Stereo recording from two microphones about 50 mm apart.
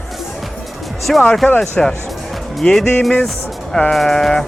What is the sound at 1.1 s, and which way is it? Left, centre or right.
Speech, centre.